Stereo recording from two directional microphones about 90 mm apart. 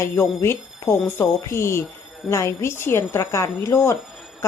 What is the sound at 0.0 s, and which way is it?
Speech, 30° left (ahead or behind).